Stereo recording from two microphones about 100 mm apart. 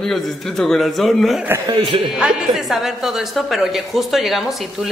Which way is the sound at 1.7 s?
55° right (ahead or behind).